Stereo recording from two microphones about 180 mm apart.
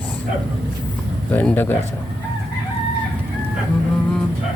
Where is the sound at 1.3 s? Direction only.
10° left (ahead or behind).